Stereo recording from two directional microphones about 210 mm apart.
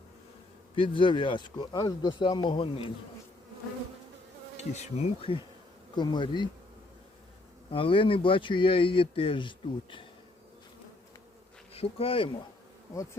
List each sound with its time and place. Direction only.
0.8 s speech: 25° left (ahead or behind)
4.5 s speech: 30° left (ahead or behind)
7.7 s speech: 25° left (ahead or behind)
11.7 s bee: 25° left (ahead or behind)